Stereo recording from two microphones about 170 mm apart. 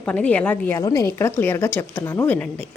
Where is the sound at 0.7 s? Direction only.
20° left (ahead or behind).